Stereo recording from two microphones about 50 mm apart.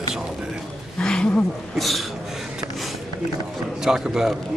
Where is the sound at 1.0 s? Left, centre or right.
Centre.